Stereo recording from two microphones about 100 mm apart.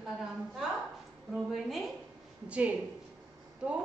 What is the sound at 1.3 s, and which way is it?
Speech, centre (ahead or behind).